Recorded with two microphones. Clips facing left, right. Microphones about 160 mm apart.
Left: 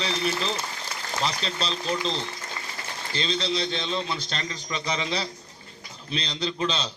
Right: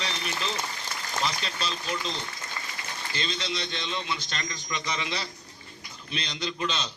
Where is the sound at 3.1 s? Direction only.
30° left (ahead or behind).